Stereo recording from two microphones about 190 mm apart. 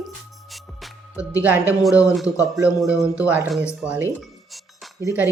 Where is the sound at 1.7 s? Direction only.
5° right (ahead or behind).